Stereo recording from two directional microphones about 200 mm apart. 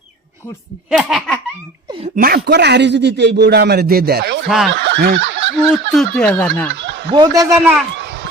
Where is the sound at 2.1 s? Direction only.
50° right (ahead or behind).